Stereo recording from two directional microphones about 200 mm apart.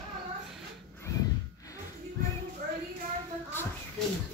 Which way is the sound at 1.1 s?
15° left (ahead or behind).